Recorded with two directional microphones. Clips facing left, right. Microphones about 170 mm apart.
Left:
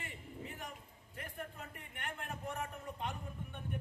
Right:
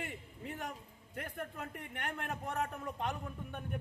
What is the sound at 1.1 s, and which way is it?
A man's voice, 65° right (ahead or behind).